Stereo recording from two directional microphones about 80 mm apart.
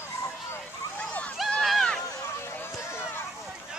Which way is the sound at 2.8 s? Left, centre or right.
Left.